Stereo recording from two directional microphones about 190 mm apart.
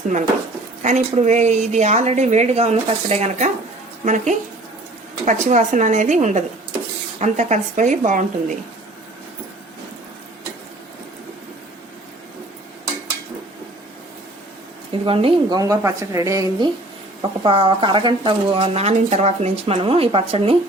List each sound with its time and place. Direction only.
0.8 s a woman's voice: 40° right (ahead or behind)
15.0 s a woman's voice: 30° right (ahead or behind)